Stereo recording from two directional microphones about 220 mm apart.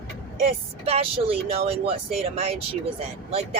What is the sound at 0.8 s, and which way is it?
Speech, 25° right (ahead or behind).